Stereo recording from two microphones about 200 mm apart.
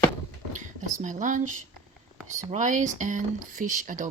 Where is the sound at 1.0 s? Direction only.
40° right (ahead or behind).